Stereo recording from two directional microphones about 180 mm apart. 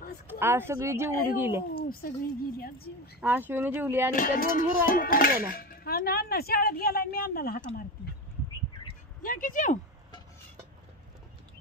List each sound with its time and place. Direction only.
0.4 s speech: 15° right (ahead or behind)
1.9 s speech: 55° left (ahead or behind)
3.2 s speech: 10° right (ahead or behind)
4.1 s speech: 50° left (ahead or behind)
9.2 s speech: 50° left (ahead or behind)